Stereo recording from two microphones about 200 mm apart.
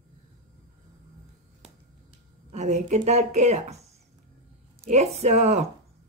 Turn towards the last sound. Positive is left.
turn(degrees=-35)  # may be behind; listen again after turning